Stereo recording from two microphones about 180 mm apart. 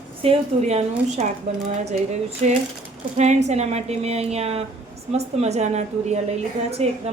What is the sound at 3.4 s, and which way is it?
A woman's voice, 40° right (ahead or behind).